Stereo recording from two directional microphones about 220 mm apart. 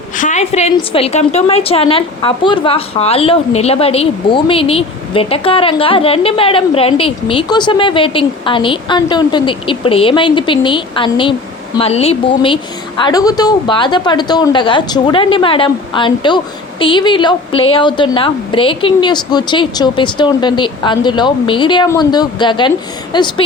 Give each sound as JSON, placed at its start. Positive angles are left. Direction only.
{"t": 0.2, "sound": "a woman's voice", "side_deg": 35}